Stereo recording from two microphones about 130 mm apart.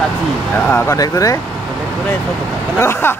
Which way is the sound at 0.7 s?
20° left (ahead or behind).